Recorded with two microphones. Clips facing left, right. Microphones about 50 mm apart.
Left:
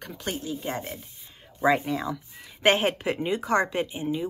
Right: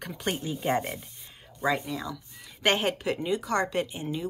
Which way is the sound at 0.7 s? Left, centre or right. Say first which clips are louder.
Right 9 dB; centre.